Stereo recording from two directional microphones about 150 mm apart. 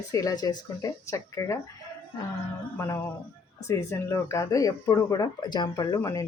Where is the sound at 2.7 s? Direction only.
20° left (ahead or behind).